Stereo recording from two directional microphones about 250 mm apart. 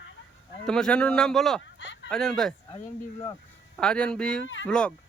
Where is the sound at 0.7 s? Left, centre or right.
Centre.